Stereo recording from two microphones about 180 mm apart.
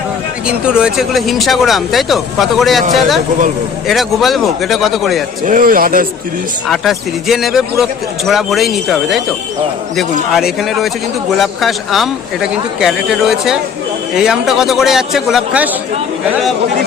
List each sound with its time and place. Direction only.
0.4 s speech: 5° right (ahead or behind)
3.8 s speech: centre (ahead or behind)
5.5 s a man's voice: 50° right (ahead or behind)
6.7 s speech: centre (ahead or behind)